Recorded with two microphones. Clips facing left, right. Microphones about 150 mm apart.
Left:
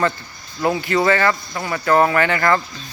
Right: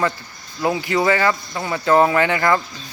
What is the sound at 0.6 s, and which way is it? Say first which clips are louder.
Speech: left 1 dB; 15° right (ahead or behind).